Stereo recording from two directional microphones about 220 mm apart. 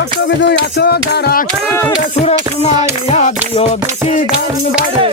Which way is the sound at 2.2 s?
30° left (ahead or behind).